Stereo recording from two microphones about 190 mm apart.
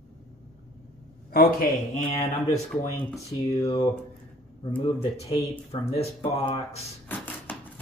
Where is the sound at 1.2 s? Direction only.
50° left (ahead or behind).